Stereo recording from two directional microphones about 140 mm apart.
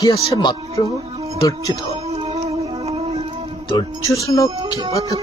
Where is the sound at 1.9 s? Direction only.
45° right (ahead or behind).